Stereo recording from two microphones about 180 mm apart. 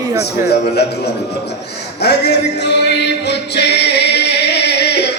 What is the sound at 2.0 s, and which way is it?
Music, 70° left (ahead or behind).